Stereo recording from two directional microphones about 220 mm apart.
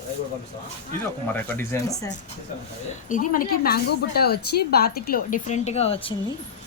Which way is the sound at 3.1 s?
40° left (ahead or behind).